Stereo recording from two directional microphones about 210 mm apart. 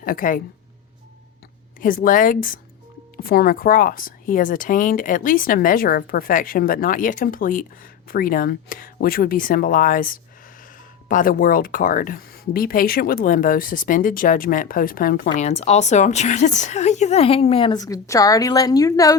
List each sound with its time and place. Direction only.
0.0 s speech: 40° left (ahead or behind)
1.8 s speech: 40° left (ahead or behind); by 19.1 s 15° left (ahead or behind)